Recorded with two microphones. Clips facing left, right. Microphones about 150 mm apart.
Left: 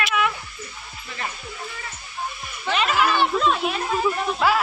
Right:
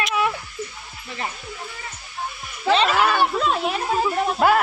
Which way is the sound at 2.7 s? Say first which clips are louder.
Right 3 dB; 35° right (ahead or behind).